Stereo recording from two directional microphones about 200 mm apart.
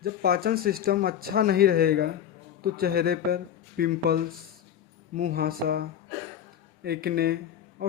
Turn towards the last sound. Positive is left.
turn(degrees=-50)  # may be behind; listen again after turning